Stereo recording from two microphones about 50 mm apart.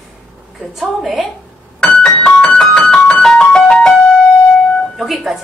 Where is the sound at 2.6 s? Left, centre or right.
Centre.